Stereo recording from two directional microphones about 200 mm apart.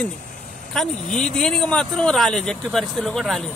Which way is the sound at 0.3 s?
45° left (ahead or behind).